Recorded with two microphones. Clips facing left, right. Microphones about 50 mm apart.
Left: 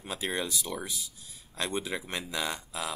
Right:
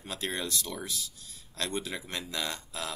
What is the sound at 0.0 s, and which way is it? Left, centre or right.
Speech, centre.